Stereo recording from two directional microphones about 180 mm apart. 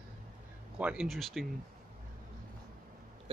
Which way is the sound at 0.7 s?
5° right (ahead or behind).